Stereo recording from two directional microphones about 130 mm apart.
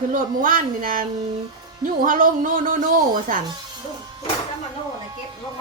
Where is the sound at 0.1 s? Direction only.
90° right.